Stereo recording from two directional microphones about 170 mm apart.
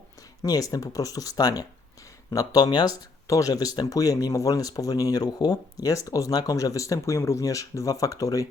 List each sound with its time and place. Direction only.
0.4 s speech: 20° left (ahead or behind)